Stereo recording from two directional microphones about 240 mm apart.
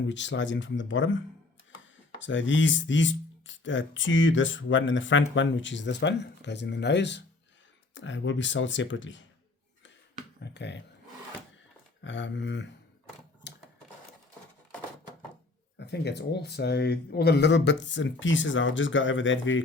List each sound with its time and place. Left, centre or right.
0.1 s speech: left
10.4 s speech: left
12.0 s speech: left
13.4 s typewriter: left
15.8 s speech: left